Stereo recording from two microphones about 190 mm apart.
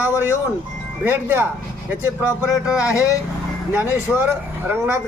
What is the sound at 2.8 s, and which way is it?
Speech, 15° left (ahead or behind).